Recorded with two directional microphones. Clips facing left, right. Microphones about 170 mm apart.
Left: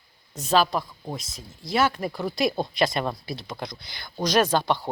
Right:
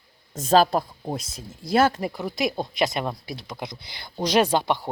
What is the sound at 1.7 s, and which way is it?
Speech, 50° right (ahead or behind).